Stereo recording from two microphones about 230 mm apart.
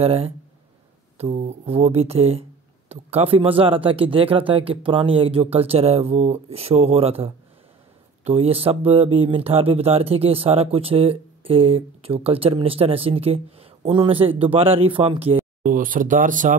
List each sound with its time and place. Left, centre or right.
0.0 s speech: right
15.6 s speech: right